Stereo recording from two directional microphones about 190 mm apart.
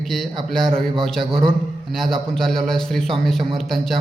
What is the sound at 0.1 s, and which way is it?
A man's voice, centre (ahead or behind).